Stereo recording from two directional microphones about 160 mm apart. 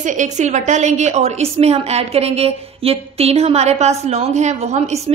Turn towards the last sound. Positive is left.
turn(degrees=-45)  # may be behind; listen again after turning